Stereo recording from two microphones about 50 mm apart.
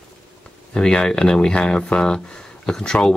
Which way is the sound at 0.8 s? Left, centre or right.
Centre.